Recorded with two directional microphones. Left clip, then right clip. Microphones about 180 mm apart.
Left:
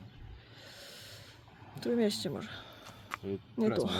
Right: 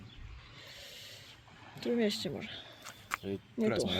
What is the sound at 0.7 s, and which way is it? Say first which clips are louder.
Rub: even; 15° left (ahead or behind).